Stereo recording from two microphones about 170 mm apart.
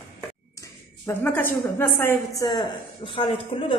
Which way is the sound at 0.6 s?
15° left (ahead or behind).